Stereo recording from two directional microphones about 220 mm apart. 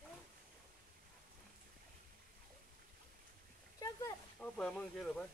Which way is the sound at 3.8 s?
15° left (ahead or behind).